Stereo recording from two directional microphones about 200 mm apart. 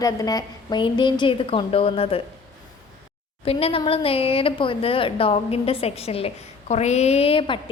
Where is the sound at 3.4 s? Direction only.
30° left (ahead or behind).